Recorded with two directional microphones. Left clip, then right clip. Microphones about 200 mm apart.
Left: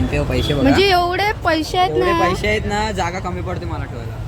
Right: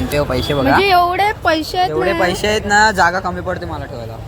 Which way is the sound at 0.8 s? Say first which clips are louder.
Right 2 dB; 20° left (ahead or behind).